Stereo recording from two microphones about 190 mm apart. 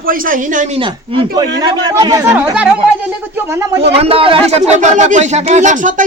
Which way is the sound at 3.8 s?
30° right (ahead or behind).